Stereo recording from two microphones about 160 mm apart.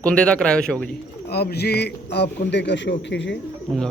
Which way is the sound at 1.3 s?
90° left.